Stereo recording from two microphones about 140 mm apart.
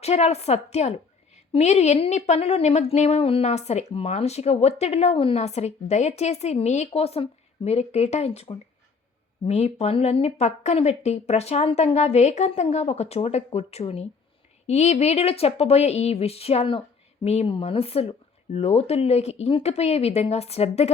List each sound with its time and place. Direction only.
0.0 s a woman's voice: 50° left (ahead or behind)